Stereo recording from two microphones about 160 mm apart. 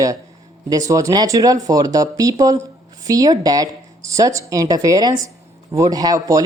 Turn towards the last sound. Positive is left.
turn(degrees=-20)  # may be behind; listen again after turning